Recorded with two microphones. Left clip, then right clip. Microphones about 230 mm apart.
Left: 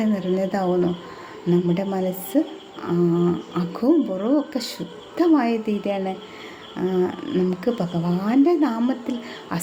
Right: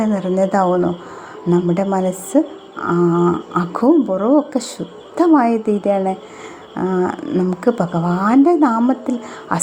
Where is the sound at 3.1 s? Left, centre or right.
Centre.